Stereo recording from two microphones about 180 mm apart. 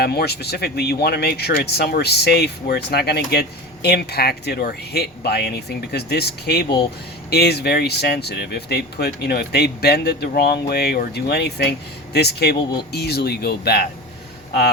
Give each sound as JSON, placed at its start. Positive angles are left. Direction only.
{"t": 0.0, "sound": "speech", "side_deg": 60}